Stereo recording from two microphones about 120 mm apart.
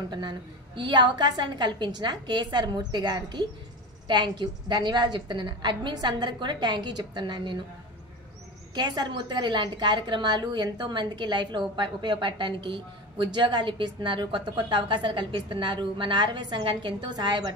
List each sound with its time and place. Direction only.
0.1 s a woman's voice: 40° right (ahead or behind)
8.7 s a woman's voice: 35° right (ahead or behind)